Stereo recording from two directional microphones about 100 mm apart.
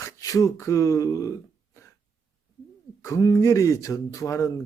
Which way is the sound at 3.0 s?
35° left (ahead or behind).